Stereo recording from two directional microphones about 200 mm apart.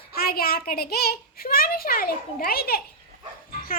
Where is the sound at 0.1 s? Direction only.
50° left (ahead or behind).